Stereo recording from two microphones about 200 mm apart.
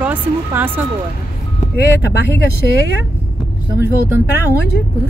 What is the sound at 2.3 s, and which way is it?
Speech, 60° left (ahead or behind).